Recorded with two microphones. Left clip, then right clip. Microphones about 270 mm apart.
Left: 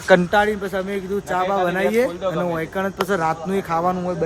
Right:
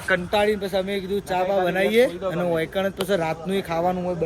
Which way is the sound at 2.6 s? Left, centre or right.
Centre.